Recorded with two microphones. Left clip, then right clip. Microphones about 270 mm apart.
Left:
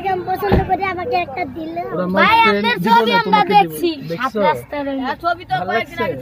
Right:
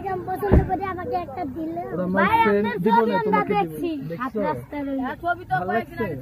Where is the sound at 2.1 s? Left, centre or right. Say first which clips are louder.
Left 6 dB; left.